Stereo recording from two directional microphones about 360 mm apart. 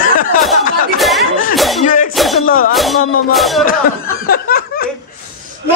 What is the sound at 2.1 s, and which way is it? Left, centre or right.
Speech, centre.